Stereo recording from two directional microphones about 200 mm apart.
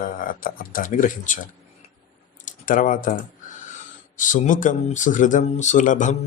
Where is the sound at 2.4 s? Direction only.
40° left (ahead or behind).